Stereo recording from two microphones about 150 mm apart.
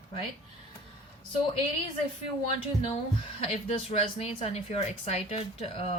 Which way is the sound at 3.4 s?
40° left (ahead or behind).